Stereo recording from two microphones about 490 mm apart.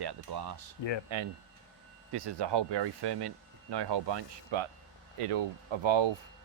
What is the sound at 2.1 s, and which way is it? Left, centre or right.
Speech, right.